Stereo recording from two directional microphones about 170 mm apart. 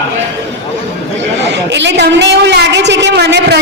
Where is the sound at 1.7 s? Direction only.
90° right.